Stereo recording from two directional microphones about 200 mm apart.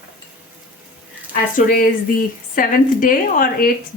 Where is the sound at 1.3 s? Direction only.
45° left (ahead or behind).